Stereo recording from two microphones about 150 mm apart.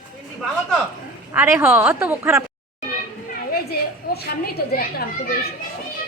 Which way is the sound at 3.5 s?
90° left.